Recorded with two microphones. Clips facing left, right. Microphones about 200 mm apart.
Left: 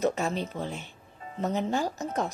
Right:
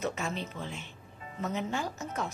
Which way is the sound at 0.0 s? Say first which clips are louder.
Left 7 dB; 35° left (ahead or behind).